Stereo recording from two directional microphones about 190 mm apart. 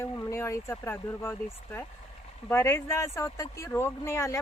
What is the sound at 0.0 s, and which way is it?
Speech, 15° left (ahead or behind).